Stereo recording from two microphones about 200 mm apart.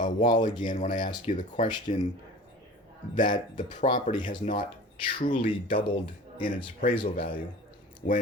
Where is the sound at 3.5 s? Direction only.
40° left (ahead or behind).